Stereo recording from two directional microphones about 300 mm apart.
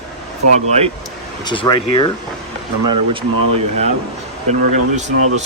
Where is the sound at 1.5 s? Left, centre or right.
Centre.